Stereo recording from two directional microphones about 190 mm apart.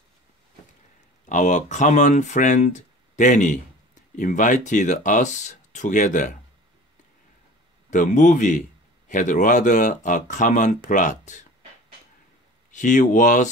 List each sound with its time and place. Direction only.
1.3 s speech: 40° left (ahead or behind)
7.9 s speech: 40° left (ahead or behind)
12.7 s speech: 40° left (ahead or behind)